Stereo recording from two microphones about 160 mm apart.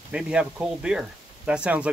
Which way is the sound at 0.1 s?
5° right (ahead or behind).